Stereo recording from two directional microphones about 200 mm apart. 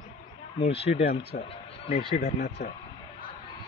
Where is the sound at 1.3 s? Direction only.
45° left (ahead or behind).